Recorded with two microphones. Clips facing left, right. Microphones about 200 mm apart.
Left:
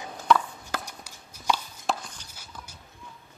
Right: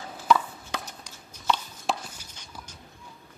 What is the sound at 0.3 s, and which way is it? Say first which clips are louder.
Chopping: even; centre (ahead or behind).